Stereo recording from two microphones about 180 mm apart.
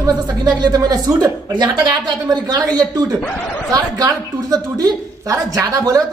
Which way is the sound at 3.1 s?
5° left (ahead or behind).